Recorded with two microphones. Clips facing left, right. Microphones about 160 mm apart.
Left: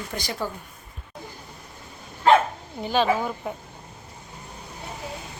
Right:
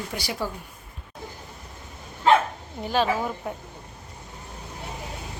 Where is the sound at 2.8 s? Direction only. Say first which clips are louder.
Left 2 dB; centre (ahead or behind).